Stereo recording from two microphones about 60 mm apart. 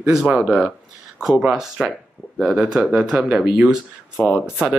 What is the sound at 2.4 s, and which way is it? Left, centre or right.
Speech, centre.